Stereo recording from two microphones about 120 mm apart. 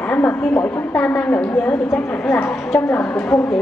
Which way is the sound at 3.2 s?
20° left (ahead or behind).